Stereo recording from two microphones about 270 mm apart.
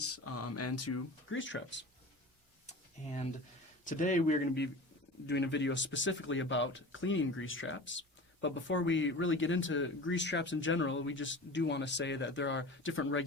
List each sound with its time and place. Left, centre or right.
0.0 s speech: left
1.3 s speech: left
2.6 s a sound: left
3.8 s speech: left
5.2 s speech: left